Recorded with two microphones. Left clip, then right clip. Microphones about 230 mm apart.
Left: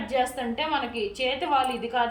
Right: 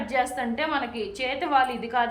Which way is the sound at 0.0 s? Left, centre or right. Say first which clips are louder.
Right 1 dB; centre.